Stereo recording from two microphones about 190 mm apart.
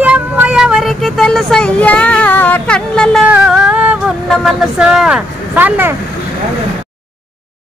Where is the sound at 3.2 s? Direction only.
5° right (ahead or behind).